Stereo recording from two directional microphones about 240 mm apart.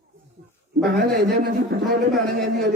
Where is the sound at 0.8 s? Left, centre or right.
Centre.